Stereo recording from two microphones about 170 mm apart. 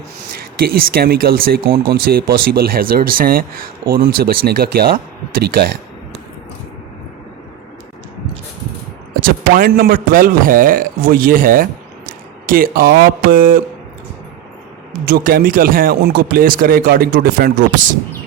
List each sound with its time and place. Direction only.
0.6 s speech: 60° right (ahead or behind)
9.2 s a man's voice: 60° right (ahead or behind)
15.0 s speech: 60° right (ahead or behind)